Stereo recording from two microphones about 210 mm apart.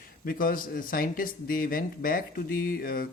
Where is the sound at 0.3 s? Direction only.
40° left (ahead or behind).